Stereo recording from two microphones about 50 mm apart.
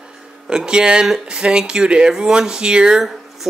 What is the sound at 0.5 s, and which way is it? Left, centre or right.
Speech, centre.